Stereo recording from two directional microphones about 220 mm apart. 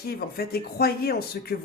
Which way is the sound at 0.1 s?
45° left (ahead or behind).